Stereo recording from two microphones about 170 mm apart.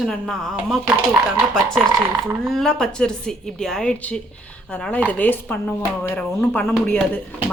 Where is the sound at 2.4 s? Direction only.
5° left (ahead or behind).